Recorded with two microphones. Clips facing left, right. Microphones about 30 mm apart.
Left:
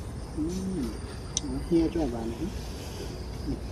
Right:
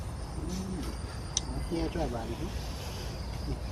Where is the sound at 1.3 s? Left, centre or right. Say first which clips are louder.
Left 9 dB; centre.